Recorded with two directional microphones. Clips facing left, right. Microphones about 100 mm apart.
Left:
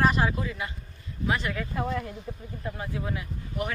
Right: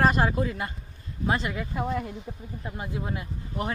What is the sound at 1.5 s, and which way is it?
Speech, 15° right (ahead or behind).